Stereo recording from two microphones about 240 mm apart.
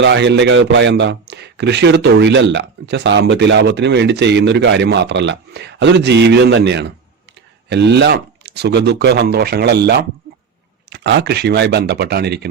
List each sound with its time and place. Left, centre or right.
0.0 s a man's voice: right